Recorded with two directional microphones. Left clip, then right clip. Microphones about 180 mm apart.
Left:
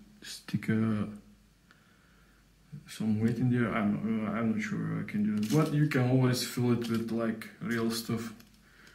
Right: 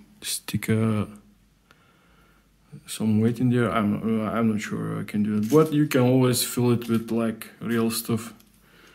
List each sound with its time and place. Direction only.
0.2 s speech: 55° right (ahead or behind); by 1.0 s 40° right (ahead or behind)
2.8 s speech: 45° right (ahead or behind)